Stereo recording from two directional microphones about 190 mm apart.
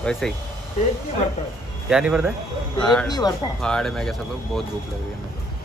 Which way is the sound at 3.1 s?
20° left (ahead or behind).